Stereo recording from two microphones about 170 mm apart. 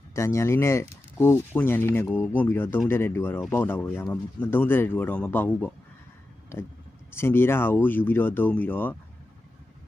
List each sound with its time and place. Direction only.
0.1 s speech: 15° left (ahead or behind)